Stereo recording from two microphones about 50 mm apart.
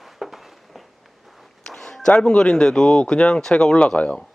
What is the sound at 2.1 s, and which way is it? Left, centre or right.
Speech, centre.